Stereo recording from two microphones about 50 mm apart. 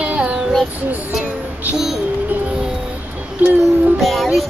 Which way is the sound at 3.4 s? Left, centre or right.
Right.